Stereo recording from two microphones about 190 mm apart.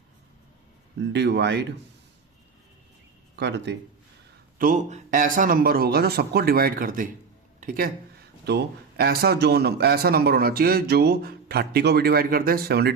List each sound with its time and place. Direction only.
0.9 s a man's voice: 65° right (ahead or behind)
3.3 s a man's voice: 65° right (ahead or behind)
4.5 s speech: 45° right (ahead or behind)
8.4 s a man's voice: 55° right (ahead or behind)